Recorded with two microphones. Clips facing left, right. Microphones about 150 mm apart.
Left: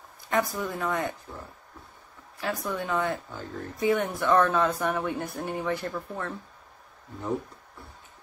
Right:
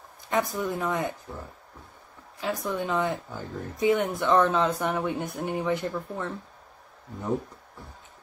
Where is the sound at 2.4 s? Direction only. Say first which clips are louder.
Right 2 dB; 20° right (ahead or behind).